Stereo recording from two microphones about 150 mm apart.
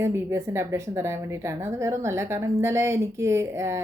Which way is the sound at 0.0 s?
20° right (ahead or behind).